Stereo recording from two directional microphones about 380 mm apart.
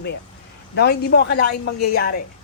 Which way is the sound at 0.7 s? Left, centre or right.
Left.